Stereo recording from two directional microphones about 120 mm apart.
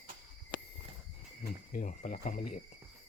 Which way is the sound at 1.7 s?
90° left.